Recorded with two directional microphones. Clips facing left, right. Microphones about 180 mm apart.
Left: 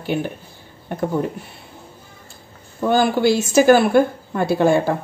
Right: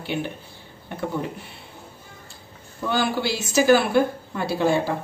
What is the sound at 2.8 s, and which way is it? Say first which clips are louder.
Speech: left 7 dB; 45° left (ahead or behind).